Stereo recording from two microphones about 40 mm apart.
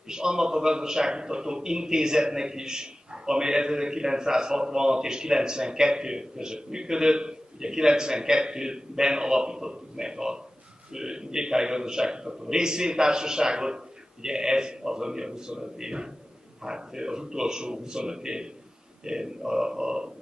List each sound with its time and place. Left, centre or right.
0.1 s a man's voice: centre